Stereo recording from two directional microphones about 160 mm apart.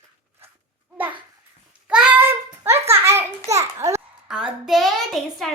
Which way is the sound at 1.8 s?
5° right (ahead or behind).